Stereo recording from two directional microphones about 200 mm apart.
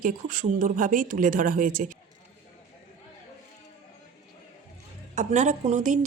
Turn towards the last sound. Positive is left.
turn(degrees=-40)  # may be behind; listen again after turning